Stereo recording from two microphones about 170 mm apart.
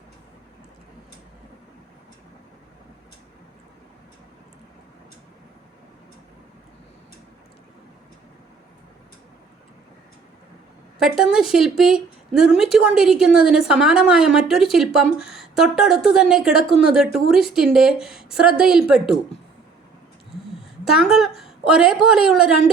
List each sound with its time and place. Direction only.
11.0 s a woman's voice: 5° right (ahead or behind)
20.8 s a woman's voice: centre (ahead or behind)